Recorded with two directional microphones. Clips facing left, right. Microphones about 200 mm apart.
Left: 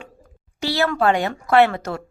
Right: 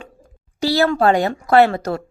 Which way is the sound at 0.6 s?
35° right (ahead or behind).